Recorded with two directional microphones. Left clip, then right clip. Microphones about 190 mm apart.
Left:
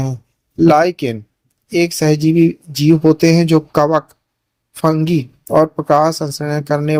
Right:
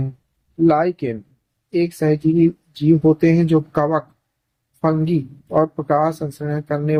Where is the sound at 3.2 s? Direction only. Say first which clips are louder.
Left 4 dB; 30° left (ahead or behind).